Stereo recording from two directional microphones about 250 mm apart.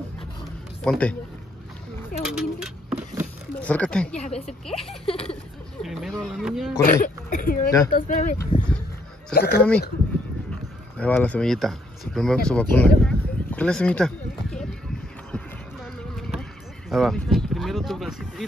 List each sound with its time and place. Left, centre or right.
0.8 s speech: centre
2.2 s a sound: centre
4.2 s speech: left
4.6 s speech: centre
5.0 s speech: left
5.8 s speech: centre
6.8 s speech: left
9.3 s speech: left
11.0 s speech: centre
13.0 s a sound: centre
16.9 s speech: centre